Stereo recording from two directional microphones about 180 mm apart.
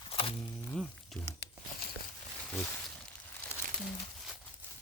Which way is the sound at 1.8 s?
55° left (ahead or behind).